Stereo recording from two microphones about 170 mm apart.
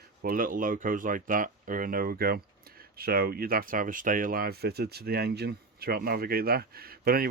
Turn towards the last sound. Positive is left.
turn(degrees=-65)  # may be behind; listen again after turning